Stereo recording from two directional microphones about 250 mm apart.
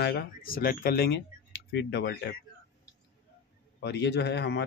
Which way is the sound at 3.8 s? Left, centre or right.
Left.